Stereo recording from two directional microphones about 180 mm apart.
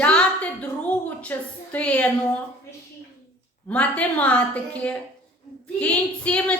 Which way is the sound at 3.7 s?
5° left (ahead or behind).